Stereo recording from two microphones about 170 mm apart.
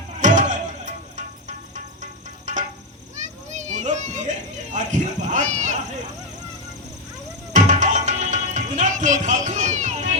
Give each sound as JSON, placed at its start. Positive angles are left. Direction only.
{"t": 0.2, "sound": "music", "side_deg": -45}
{"t": 2.5, "sound": "insect", "side_deg": -45}
{"t": 3.5, "sound": "children playing", "side_deg": -45}
{"t": 7.5, "sound": "music", "side_deg": -45}